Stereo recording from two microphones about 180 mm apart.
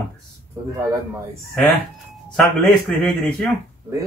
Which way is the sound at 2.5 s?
5° left (ahead or behind).